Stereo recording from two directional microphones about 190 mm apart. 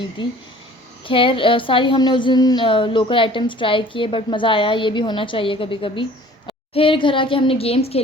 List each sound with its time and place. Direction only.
0.2 s a woman's voice: 25° left (ahead or behind)